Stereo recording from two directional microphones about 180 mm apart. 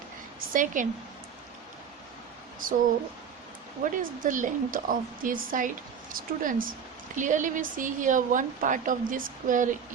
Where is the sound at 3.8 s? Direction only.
45° right (ahead or behind).